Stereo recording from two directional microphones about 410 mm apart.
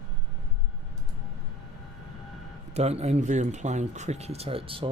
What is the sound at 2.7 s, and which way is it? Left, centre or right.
Speech, centre.